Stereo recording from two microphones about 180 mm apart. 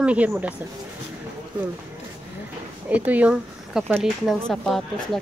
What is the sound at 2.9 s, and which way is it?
Speech, 10° right (ahead or behind).